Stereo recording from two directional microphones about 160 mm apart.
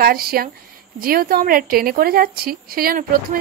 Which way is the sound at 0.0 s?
70° right (ahead or behind).